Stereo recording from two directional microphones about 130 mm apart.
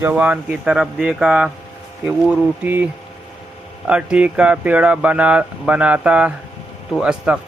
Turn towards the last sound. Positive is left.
turn(degrees=-5)  # may be behind; listen again after turning